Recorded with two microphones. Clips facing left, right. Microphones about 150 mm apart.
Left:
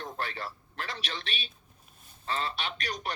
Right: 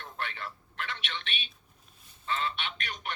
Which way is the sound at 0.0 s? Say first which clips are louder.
Left 3 dB; 40° left (ahead or behind).